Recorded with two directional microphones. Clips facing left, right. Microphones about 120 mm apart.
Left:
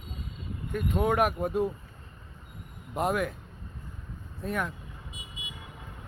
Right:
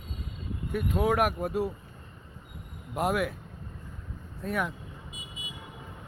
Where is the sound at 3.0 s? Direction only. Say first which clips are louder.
Even; 5° right (ahead or behind).